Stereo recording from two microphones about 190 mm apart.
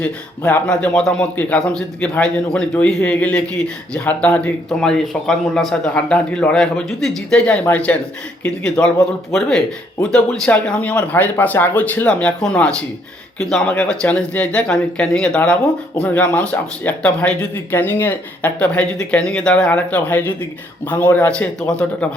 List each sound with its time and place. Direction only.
0.0 s a man's voice: 10° left (ahead or behind)